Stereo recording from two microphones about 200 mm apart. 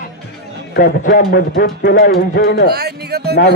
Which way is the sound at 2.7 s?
55° right (ahead or behind).